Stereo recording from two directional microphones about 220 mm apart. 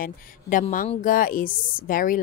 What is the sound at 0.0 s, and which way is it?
A woman's voice, 35° left (ahead or behind).